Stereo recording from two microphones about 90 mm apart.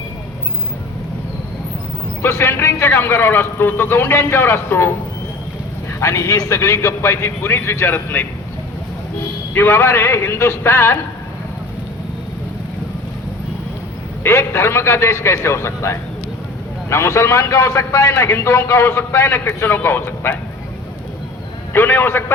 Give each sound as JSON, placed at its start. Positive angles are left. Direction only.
{"t": 2.2, "sound": "a man's voice", "side_deg": 30}
{"t": 6.0, "sound": "a man's voice", "side_deg": 35}
{"t": 9.6, "sound": "a man's voice", "side_deg": 25}
{"t": 14.3, "sound": "a man's voice", "side_deg": 30}
{"t": 21.7, "sound": "a man's voice", "side_deg": 25}